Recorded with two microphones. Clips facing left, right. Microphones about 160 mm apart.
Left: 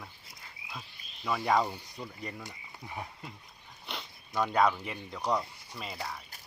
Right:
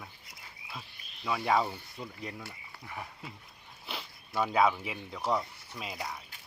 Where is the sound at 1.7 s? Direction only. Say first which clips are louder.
Even; 15° left (ahead or behind).